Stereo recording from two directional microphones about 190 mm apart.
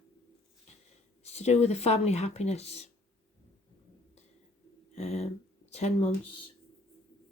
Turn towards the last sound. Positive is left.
turn(degrees=35)  # may be behind; listen again after turning